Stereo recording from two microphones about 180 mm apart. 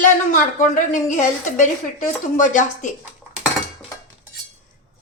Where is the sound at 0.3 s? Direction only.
45° left (ahead or behind).